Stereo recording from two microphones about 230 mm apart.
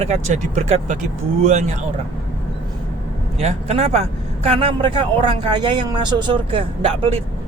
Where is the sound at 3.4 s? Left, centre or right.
Right.